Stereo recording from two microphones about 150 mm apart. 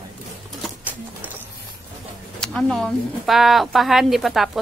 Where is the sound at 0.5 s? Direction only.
Centre (ahead or behind).